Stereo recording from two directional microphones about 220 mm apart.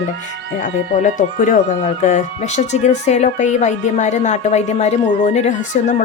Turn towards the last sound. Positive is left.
turn(degrees=35)  # may be behind; listen again after turning